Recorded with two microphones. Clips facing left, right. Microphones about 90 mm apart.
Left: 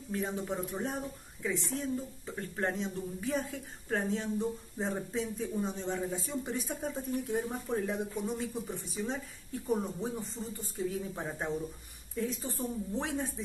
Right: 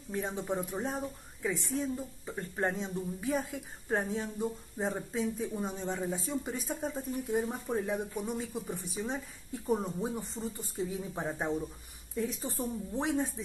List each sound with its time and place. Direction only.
0.1 s speech: 20° right (ahead or behind)